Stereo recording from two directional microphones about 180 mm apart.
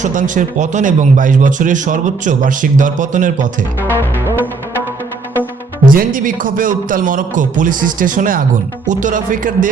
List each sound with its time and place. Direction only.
0.0 s speech: 45° right (ahead or behind)
5.8 s speech: 50° right (ahead or behind)